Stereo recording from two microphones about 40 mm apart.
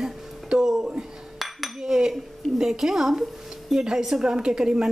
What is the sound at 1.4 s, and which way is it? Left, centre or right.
Chink, centre.